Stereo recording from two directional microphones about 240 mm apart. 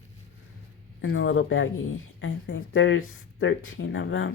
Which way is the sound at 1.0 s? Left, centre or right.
Left.